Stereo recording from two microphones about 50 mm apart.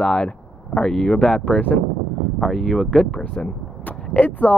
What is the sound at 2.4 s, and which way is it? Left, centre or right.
Speech, centre.